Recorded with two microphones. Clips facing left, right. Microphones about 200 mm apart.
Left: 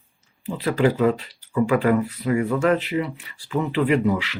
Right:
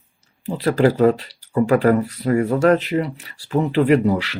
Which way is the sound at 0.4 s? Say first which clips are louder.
Right 3 dB; 35° right (ahead or behind).